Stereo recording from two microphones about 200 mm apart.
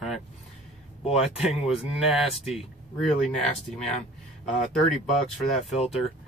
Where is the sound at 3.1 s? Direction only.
5° left (ahead or behind).